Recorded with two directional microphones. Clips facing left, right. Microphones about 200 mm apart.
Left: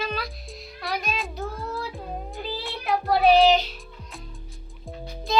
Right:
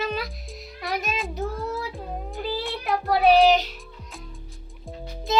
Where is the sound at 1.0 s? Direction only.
Centre (ahead or behind).